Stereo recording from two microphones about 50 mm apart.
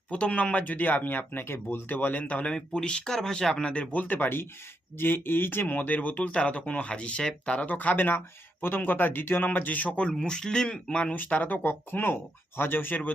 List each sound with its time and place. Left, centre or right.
0.1 s speech: left
2.0 s speech: left
2.5 s speech: centre; by 9.5 s left
9.5 s speech: left
10.1 s speech: centre
11.1 s speech: left